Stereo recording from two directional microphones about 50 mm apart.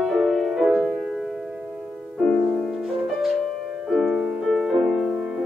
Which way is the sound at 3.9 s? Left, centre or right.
Centre.